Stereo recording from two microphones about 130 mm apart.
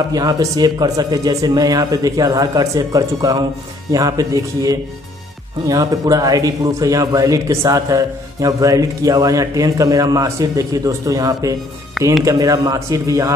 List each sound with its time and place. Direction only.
0.1 s a man's voice: 30° right (ahead or behind)
12.0 s speech: centre (ahead or behind)
12.3 s a man's voice: 25° right (ahead or behind)